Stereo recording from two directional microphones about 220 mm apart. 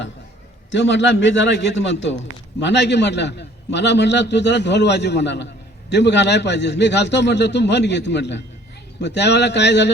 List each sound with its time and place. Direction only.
0.7 s a man's voice: 55° left (ahead or behind)